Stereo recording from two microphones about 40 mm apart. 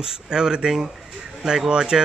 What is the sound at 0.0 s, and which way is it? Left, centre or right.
Speech, centre.